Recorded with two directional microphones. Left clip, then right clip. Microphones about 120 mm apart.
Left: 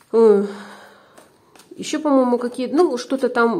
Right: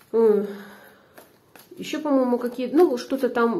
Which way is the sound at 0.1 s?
45° left (ahead or behind).